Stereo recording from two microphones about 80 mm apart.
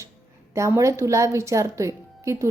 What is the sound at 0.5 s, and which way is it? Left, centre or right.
A woman's voice, right.